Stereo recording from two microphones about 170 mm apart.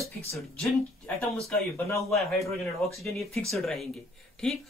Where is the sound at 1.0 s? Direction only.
5° left (ahead or behind).